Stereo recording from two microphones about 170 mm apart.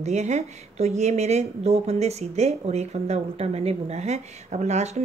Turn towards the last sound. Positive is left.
turn(degrees=-40)  # may be behind; listen again after turning